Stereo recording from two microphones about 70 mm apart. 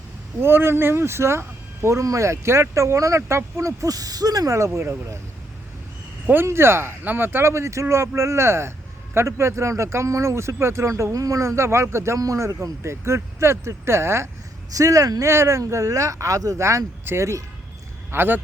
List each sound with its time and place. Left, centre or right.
0.3 s speech: right
3.8 s speech: right
6.2 s speech: right
14.7 s speech: right
15.3 s speech: right
18.1 s speech: right